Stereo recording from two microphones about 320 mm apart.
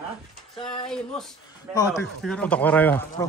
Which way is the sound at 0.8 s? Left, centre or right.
Centre.